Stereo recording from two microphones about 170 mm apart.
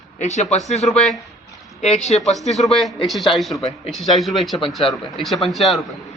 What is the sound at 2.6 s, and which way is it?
Speech, centre (ahead or behind).